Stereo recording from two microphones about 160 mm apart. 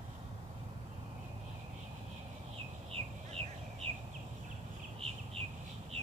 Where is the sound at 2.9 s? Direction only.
40° right (ahead or behind).